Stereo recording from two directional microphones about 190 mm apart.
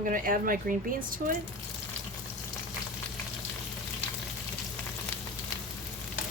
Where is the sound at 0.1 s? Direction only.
50° right (ahead or behind).